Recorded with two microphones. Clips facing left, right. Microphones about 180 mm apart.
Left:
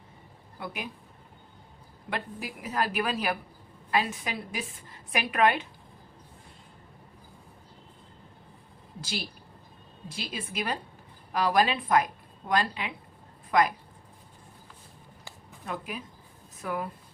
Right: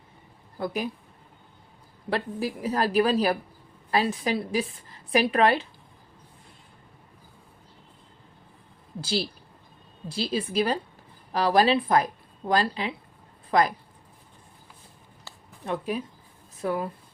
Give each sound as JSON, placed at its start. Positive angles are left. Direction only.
{"t": 0.6, "sound": "a woman's voice", "side_deg": -35}
{"t": 2.0, "sound": "a woman's voice", "side_deg": -35}
{"t": 9.0, "sound": "a woman's voice", "side_deg": -30}
{"t": 15.6, "sound": "a woman's voice", "side_deg": -30}